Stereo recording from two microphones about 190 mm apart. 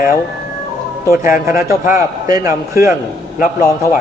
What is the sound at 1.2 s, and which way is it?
A man's voice, 15° right (ahead or behind).